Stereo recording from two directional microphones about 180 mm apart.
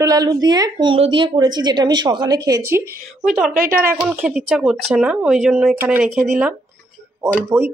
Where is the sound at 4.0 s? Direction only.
5° right (ahead or behind).